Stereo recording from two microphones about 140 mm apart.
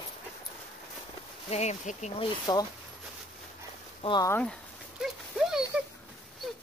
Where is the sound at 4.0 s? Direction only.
35° left (ahead or behind).